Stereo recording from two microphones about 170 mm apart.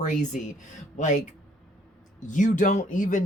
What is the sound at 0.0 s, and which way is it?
Speech, 45° left (ahead or behind).